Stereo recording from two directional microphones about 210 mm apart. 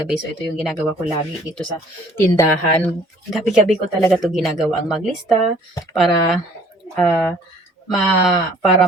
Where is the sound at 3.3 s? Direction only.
Centre (ahead or behind).